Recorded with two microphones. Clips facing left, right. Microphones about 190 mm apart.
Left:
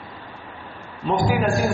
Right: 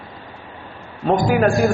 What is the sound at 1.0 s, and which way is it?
Speech, 55° right (ahead or behind).